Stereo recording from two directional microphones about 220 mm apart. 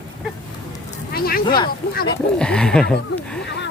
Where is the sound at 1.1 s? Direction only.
45° left (ahead or behind).